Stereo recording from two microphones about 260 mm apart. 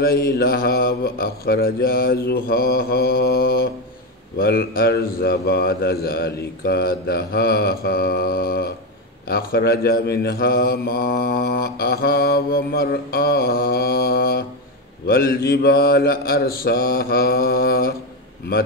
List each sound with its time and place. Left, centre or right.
0.0 s mantra: left